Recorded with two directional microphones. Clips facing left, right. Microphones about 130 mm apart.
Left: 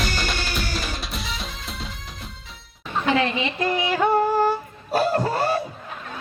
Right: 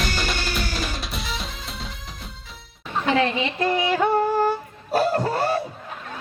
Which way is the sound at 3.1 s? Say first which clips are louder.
Right 1 dB; 40° right (ahead or behind).